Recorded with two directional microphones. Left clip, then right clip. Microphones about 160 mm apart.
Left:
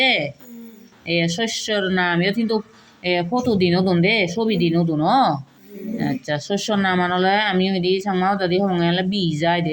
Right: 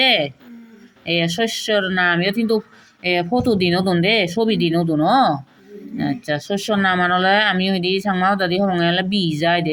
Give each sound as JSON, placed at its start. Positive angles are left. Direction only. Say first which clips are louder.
{"t": 0.0, "sound": "speech", "louder": "right 2 dB", "side_deg": -20}